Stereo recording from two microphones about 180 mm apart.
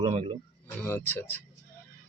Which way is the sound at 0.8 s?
10° left (ahead or behind).